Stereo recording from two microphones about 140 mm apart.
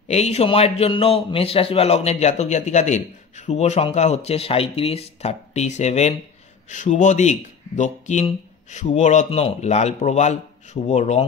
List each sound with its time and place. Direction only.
0.1 s a man's voice: 50° left (ahead or behind)